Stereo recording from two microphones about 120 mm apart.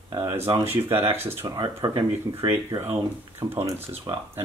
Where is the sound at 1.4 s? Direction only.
35° right (ahead or behind).